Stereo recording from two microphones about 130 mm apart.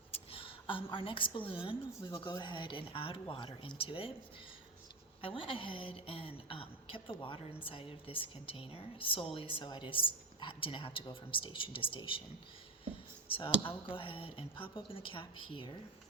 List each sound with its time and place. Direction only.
0.1 s a woman's voice: 45° left (ahead or behind)
5.2 s a woman's voice: 40° left (ahead or behind)
13.2 s a woman's voice: 40° left (ahead or behind)